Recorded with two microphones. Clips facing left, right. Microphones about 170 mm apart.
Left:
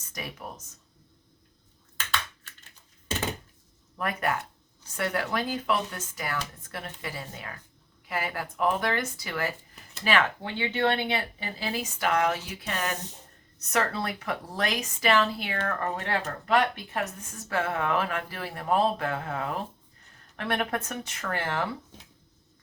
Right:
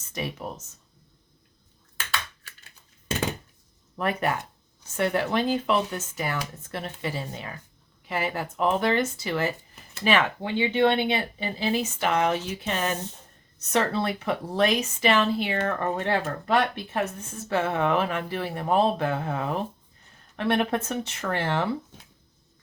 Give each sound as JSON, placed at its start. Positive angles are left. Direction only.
{"t": 0.1, "sound": "speech", "side_deg": -25}
{"t": 2.0, "sound": "computer keyboard", "side_deg": -10}
{"t": 3.9, "sound": "speech", "side_deg": -25}